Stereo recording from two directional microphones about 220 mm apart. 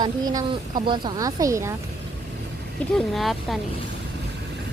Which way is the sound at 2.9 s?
Centre (ahead or behind).